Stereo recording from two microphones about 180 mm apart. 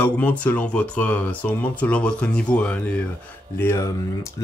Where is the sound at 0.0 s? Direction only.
10° left (ahead or behind).